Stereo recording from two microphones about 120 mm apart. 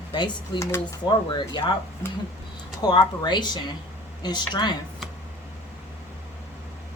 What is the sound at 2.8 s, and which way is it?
Speech, 35° left (ahead or behind).